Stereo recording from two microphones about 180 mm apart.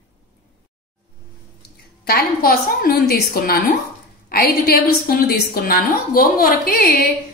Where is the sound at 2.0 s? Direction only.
55° left (ahead or behind).